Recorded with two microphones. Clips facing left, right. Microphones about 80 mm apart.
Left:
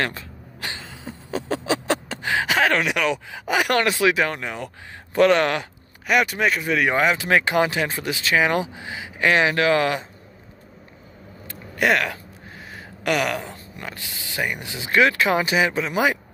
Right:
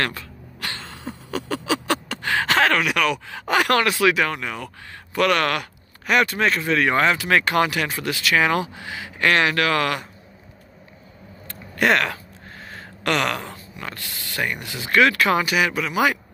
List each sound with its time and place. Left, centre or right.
0.0 s a sound: left
2.7 s speech: centre
11.4 s speech: centre; by 16.2 s left